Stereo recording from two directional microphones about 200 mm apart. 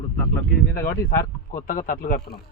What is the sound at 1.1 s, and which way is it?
Speech, 45° left (ahead or behind).